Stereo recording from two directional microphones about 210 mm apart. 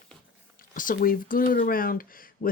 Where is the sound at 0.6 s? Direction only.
40° left (ahead or behind).